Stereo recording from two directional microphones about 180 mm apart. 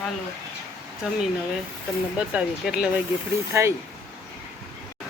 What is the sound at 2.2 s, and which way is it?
Speech, 5° right (ahead or behind).